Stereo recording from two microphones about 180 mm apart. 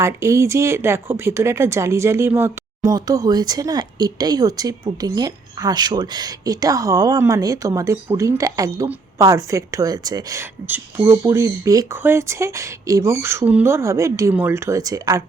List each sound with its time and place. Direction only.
0.0 s speech: 15° right (ahead or behind)